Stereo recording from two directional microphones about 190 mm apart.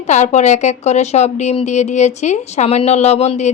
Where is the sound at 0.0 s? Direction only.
40° left (ahead or behind).